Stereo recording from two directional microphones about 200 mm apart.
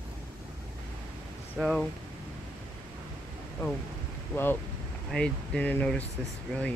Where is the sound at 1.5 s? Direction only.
Centre (ahead or behind).